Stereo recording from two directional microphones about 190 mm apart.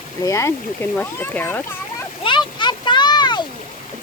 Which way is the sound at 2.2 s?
25° left (ahead or behind).